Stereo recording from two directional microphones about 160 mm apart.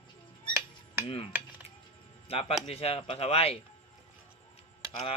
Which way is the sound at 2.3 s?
35° left (ahead or behind).